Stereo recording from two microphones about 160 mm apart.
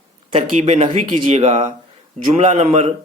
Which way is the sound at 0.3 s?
40° right (ahead or behind).